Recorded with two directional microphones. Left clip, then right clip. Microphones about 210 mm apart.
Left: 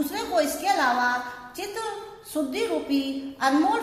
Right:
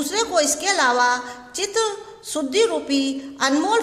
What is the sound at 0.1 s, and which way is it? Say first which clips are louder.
A woman's voice: right 8 dB; 50° right (ahead or behind).